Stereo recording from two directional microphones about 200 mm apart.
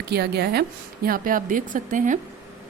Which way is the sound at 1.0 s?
45° right (ahead or behind).